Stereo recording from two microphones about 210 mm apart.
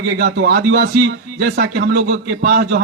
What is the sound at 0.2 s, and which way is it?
A man's voice, 45° right (ahead or behind).